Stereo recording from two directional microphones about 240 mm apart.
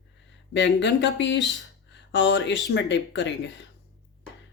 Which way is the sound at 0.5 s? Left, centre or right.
Left.